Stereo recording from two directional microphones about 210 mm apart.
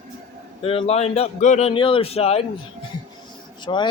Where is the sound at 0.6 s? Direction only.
25° left (ahead or behind).